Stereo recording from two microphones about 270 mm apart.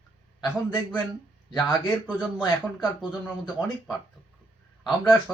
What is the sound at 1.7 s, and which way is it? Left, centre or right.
Speech, centre.